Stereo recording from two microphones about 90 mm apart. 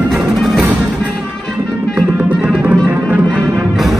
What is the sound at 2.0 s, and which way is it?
Music, 15° right (ahead or behind).